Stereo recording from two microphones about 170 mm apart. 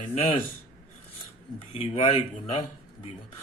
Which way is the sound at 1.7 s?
30° left (ahead or behind).